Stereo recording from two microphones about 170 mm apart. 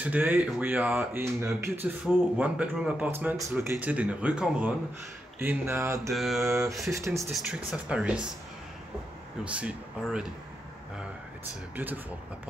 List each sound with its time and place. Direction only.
0.0 s speech: 10° right (ahead or behind)
6.1 s mantra: centre (ahead or behind)
6.4 s speech: 15° right (ahead or behind)
7.3 s speech: 5° right (ahead or behind)
9.4 s speech: 5° right (ahead or behind)
11.7 s speech: 10° right (ahead or behind)